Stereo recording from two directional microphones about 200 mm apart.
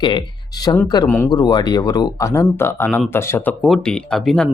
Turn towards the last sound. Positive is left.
turn(degrees=0)  # may be behind; listen again after turning